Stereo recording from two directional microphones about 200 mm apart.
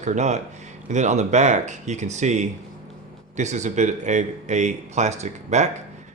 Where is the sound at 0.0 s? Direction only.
35° right (ahead or behind).